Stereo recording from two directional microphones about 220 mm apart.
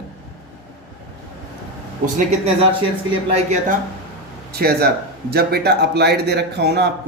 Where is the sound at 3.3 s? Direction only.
35° right (ahead or behind).